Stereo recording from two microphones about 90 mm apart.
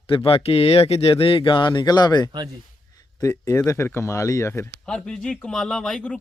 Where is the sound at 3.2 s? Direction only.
40° left (ahead or behind).